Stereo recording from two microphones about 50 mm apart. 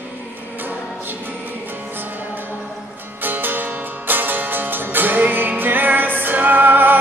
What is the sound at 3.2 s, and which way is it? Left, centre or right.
Music, right.